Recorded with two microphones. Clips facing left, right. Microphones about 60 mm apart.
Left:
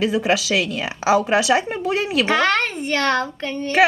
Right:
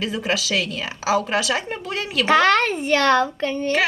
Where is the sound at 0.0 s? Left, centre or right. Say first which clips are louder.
Left 5 dB; left.